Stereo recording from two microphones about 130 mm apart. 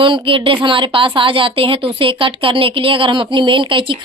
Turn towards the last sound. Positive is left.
turn(degrees=-40)  # may be behind; listen again after turning